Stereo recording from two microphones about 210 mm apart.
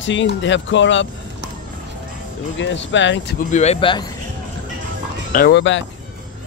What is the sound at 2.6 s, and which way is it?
Speech, 60° left (ahead or behind).